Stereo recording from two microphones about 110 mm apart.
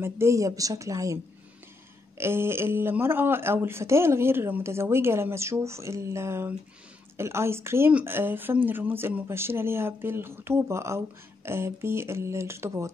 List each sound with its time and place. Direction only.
0.0 s speech: 25° right (ahead or behind)